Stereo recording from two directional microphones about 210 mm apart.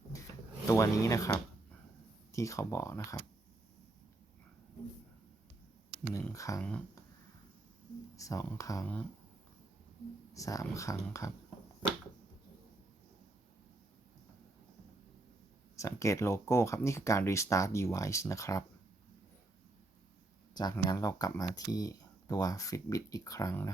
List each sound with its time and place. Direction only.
0.1 s drawer open or close: 15° left (ahead or behind)
0.7 s speech: 15° left (ahead or behind)
2.3 s speech: 15° left (ahead or behind)
6.1 s speech: 15° left (ahead or behind)
8.1 s speech: 15° left (ahead or behind)
10.3 s speech: 15° left (ahead or behind)
15.7 s speech: 15° left (ahead or behind)
20.5 s speech: 20° left (ahead or behind)